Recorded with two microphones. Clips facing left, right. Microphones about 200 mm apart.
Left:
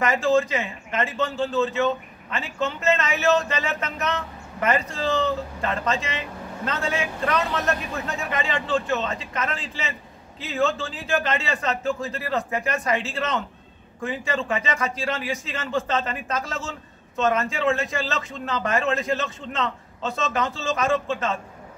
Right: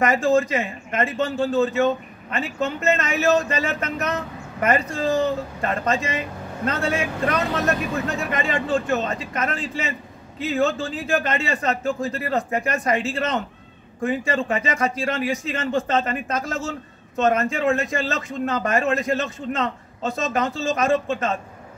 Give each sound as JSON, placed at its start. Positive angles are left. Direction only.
{"t": 0.0, "sound": "a man's voice", "side_deg": -40}